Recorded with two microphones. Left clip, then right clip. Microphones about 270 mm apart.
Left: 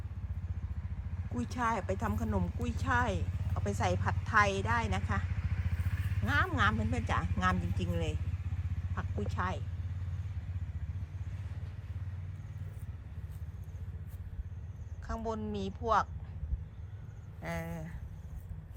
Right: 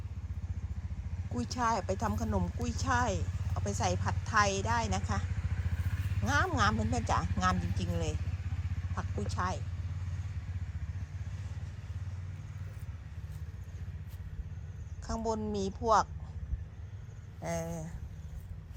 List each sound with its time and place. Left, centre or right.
1.3 s speech: centre
5.3 s vehicle: right
6.2 s a woman's voice: centre
15.0 s a woman's voice: centre
17.4 s a woman's voice: centre